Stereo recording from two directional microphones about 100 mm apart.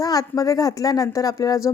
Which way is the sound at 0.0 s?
40° left (ahead or behind).